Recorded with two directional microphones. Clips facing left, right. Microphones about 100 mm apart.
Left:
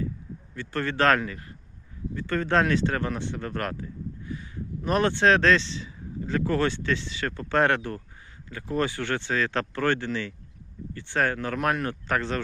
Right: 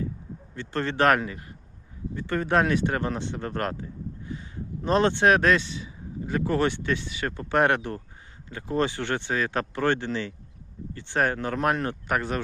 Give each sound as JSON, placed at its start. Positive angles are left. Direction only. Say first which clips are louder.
{"t": 0.5, "sound": "speech", "louder": "right 1 dB", "side_deg": -25}